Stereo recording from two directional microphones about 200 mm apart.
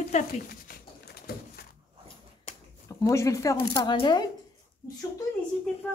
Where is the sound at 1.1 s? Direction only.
50° left (ahead or behind).